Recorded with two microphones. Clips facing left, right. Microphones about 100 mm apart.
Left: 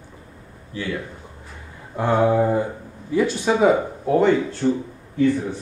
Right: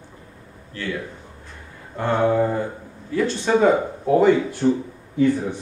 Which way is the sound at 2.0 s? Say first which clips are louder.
Left 1 dB; 10° left (ahead or behind).